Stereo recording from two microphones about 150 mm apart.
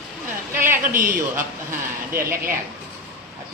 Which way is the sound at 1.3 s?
15° right (ahead or behind).